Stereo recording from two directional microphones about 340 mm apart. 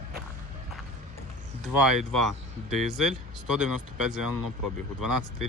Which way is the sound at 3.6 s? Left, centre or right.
Right.